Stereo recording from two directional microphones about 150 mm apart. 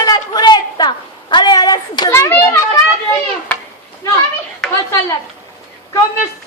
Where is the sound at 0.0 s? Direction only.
25° left (ahead or behind).